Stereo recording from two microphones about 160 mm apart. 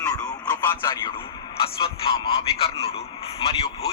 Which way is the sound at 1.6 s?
35° left (ahead or behind).